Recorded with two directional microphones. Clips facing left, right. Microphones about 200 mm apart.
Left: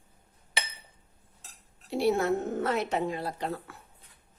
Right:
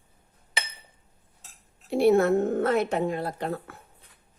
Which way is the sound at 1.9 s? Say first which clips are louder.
Right 6 dB; 55° right (ahead or behind).